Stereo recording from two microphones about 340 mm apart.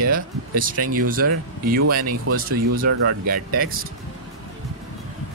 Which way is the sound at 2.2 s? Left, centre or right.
Right.